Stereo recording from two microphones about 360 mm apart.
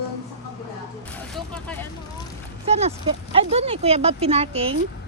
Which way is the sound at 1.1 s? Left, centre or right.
Centre.